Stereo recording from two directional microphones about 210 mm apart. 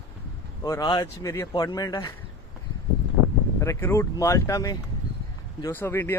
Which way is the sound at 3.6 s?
15° left (ahead or behind).